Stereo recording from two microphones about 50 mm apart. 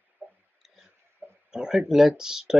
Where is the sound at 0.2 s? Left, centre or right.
Right.